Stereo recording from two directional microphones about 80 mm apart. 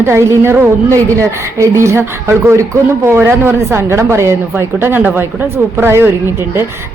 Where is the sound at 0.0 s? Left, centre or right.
Right.